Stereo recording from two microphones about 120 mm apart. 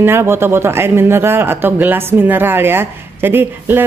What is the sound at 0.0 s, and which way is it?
Speech, 20° right (ahead or behind).